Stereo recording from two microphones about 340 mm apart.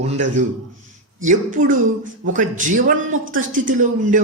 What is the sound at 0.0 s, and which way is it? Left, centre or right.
Speech, centre.